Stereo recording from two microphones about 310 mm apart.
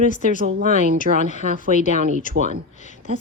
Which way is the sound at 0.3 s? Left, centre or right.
Right.